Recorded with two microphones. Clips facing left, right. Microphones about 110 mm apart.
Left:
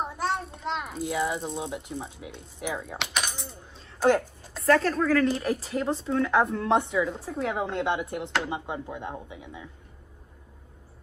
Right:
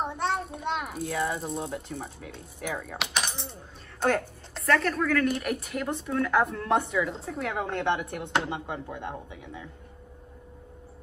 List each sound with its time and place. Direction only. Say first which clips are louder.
0.0 s a sound: even; centre (ahead or behind)
1.0 s speech: left 3 dB; 15° left (ahead or behind)
3.0 s a sound: even; centre (ahead or behind)
4.6 s a woman's voice: left 3 dB; 30° left (ahead or behind)
8.2 s speech: right 1 dB; 20° right (ahead or behind)
8.5 s speech: left 1 dB; 20° left (ahead or behind)
8.8 s speech: even; 5° left (ahead or behind)
9.3 s speech: even; 15° left (ahead or behind)